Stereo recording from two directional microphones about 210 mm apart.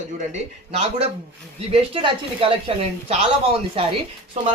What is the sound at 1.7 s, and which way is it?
Speech, 25° right (ahead or behind).